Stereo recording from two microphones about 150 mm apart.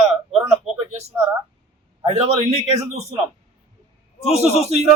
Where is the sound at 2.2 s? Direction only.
45° right (ahead or behind).